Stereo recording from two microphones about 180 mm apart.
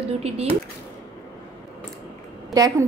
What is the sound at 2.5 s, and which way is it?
Speech, 20° right (ahead or behind).